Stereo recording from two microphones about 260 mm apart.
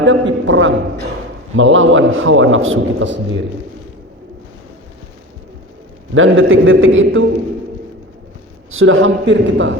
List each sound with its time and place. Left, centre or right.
0.0 s a sound: right
1.5 s a man's voice: right
6.1 s a man's voice: right
8.7 s a man's voice: right